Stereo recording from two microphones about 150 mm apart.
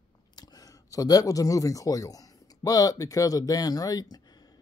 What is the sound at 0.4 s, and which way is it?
Speech, 25° left (ahead or behind).